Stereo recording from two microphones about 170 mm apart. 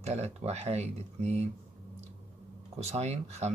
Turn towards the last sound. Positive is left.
turn(degrees=-40)  # may be behind; listen again after turning